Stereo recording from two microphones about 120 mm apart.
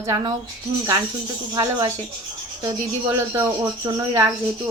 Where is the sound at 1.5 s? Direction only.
30° right (ahead or behind).